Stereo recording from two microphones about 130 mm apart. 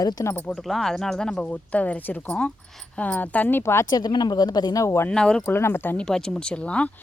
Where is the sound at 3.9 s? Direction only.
35° left (ahead or behind).